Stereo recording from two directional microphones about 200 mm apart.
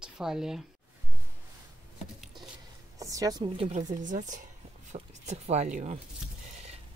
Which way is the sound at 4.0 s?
40° right (ahead or behind).